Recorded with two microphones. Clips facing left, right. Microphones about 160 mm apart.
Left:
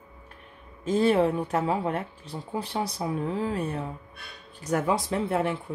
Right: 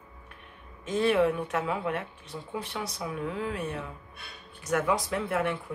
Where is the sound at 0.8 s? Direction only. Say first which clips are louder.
Left 2 dB; 35° left (ahead or behind).